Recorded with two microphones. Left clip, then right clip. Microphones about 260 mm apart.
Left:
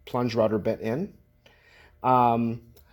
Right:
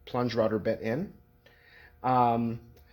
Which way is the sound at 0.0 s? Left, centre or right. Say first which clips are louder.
Left 3 dB; left.